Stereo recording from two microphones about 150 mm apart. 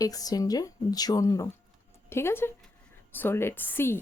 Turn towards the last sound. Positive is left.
turn(degrees=15)  # may be behind; listen again after turning